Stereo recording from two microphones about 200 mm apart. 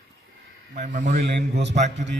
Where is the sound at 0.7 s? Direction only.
40° right (ahead or behind).